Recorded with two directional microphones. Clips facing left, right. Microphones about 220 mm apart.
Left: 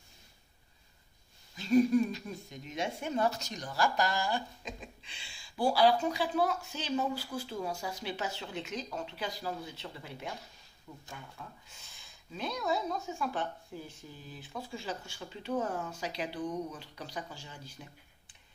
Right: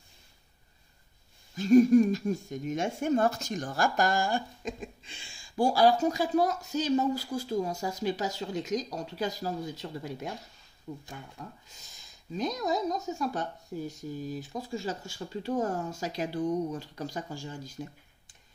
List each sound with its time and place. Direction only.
1.6 s speech: 45° right (ahead or behind)
11.7 s speech: 40° right (ahead or behind)